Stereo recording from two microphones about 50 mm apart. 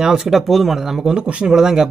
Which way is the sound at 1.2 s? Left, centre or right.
Right.